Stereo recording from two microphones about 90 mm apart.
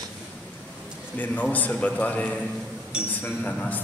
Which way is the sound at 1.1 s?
20° left (ahead or behind).